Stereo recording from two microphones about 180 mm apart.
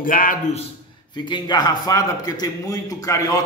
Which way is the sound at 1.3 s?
25° left (ahead or behind).